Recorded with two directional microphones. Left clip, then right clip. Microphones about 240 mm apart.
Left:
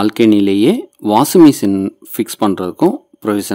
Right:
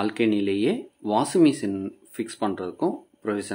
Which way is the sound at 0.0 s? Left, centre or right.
Left.